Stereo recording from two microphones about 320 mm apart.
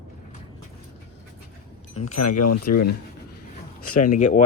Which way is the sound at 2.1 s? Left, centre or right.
Left.